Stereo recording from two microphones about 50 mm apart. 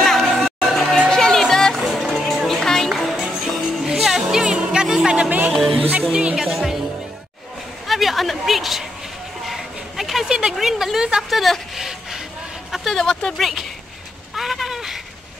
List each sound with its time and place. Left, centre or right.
0.0 s music: centre
0.7 s a sound: centre
0.9 s music: centre
1.8 s music: centre; by 5.3 s right
5.5 s music: centre
5.8 s music: right
6.1 s speech: centre
6.4 s music: centre
7.8 s a sound: centre
11.2 s speech: centre
11.7 s a sound: centre
12.9 s speech: centre
13.4 s speech: centre
14.3 s a sound: centre